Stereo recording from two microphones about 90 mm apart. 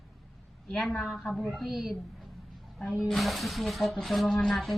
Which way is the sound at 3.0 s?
Centre (ahead or behind).